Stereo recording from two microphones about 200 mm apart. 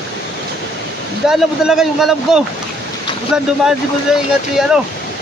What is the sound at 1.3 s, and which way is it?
A man's voice, centre (ahead or behind).